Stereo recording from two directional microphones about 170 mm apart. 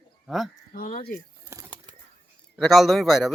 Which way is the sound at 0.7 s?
55° left (ahead or behind).